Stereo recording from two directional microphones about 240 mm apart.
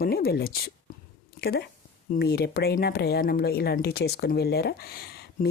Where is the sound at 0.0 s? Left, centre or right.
Left.